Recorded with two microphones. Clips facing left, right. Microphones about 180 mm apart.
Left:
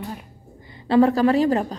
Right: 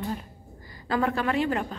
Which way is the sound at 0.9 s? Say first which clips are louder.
Left 9 dB; 35° left (ahead or behind).